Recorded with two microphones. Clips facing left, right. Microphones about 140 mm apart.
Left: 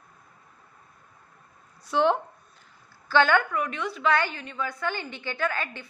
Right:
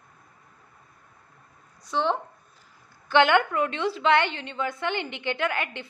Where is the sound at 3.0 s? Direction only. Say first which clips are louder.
Right 2 dB; 20° right (ahead or behind).